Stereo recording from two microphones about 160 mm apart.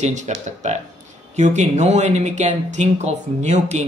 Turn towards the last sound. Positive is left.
turn(degrees=-45)  # may be behind; listen again after turning